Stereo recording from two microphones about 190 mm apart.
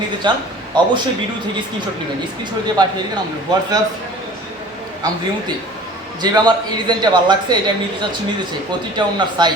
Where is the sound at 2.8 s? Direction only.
20° right (ahead or behind).